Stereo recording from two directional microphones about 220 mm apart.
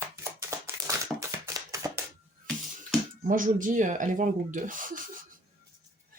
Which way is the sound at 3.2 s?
40° right (ahead or behind).